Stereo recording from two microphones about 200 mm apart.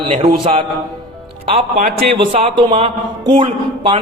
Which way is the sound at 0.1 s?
35° right (ahead or behind).